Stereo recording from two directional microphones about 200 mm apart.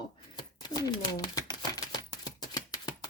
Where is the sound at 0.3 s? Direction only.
20° left (ahead or behind).